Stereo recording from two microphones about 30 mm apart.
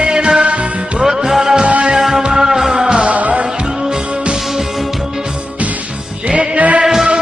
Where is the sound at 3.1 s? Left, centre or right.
Right.